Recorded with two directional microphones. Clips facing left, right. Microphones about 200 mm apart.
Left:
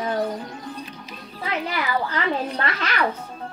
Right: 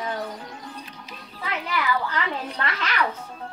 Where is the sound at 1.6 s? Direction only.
35° left (ahead or behind).